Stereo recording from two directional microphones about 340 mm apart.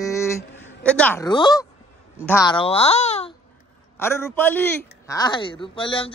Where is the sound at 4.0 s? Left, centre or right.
Centre.